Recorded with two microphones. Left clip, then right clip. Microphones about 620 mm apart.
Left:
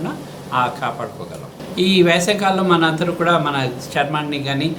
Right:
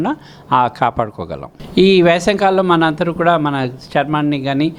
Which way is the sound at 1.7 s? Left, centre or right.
Right.